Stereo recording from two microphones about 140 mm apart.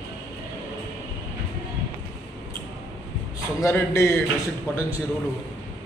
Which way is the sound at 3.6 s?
20° left (ahead or behind).